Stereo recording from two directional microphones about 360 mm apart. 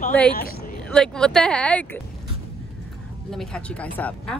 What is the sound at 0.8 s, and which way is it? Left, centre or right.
Speech, centre.